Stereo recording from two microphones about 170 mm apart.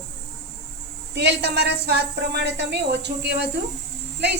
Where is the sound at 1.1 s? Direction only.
90° right.